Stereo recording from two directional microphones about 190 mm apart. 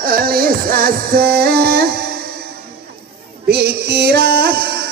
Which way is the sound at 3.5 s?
55° right (ahead or behind).